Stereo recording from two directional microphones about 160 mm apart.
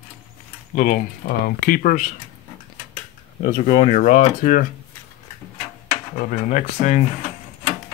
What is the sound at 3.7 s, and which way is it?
Speech, 45° left (ahead or behind).